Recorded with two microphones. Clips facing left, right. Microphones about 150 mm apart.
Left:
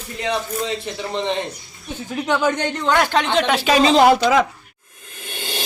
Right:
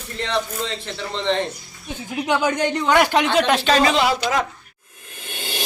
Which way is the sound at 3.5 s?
10° left (ahead or behind).